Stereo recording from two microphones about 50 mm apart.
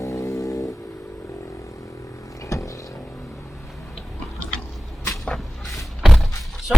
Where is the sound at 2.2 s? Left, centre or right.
Left.